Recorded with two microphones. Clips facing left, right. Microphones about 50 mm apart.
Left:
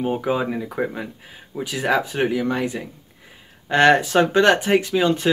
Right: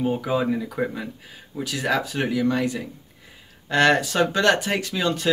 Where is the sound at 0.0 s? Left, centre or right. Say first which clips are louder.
Left 1 dB; left.